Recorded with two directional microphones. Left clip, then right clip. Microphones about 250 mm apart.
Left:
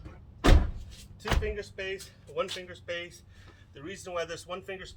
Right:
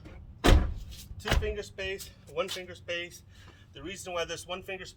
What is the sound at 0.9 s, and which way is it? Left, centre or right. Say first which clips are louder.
Chopping: right 2 dB; centre.